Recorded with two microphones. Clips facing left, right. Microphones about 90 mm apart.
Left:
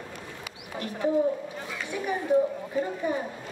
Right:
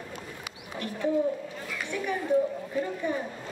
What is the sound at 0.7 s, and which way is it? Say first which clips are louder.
Speech: left 2 dB; 25° left (ahead or behind).